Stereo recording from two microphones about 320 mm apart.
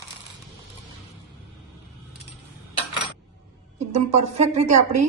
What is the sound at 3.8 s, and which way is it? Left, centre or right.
A woman's voice, right.